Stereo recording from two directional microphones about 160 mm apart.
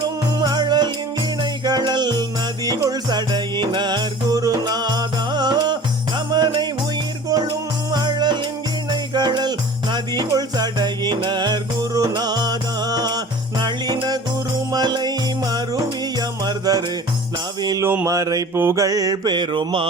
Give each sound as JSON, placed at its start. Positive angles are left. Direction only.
{"t": 0.3, "sound": "music", "side_deg": -25}
{"t": 17.6, "sound": "mantra", "side_deg": -20}